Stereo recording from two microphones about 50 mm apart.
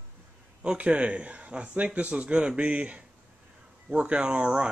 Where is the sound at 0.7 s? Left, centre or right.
Right.